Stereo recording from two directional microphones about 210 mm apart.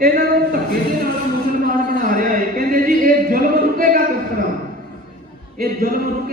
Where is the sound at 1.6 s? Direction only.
40° right (ahead or behind).